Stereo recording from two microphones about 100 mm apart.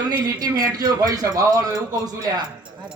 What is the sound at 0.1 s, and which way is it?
A man's voice, 45° right (ahead or behind).